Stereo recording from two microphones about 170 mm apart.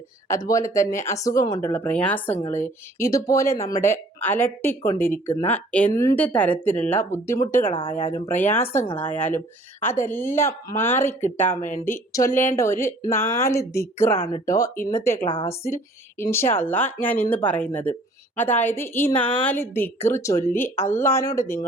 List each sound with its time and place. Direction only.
0.3 s speech: 20° left (ahead or behind)